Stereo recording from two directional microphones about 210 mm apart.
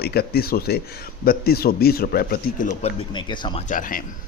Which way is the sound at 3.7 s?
40° left (ahead or behind).